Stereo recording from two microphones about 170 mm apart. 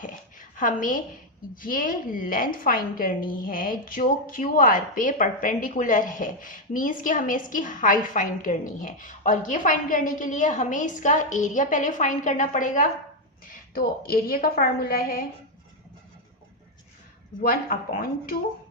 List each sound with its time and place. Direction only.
0.0 s a sound: 50° left (ahead or behind)
1.6 s a woman's voice: 55° left (ahead or behind)
17.4 s a woman's voice: 55° left (ahead or behind)